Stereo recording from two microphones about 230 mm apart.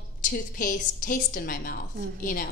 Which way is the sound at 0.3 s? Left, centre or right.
Left.